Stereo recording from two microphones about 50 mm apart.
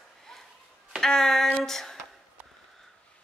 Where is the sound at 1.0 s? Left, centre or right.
Centre.